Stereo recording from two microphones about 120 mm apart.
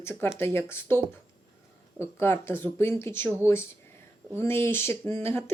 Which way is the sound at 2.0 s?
20° left (ahead or behind).